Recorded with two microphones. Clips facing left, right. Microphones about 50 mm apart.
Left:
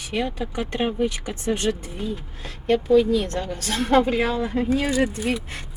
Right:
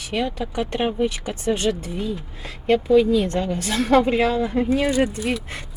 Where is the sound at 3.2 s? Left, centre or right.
Right.